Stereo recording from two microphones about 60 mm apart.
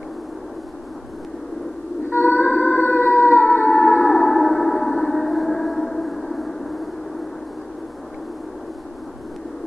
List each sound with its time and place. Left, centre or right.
2.0 s music: left
4.3 s gong: centre